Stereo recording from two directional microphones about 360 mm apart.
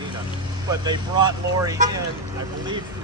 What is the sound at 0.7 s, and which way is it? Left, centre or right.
Speech, centre.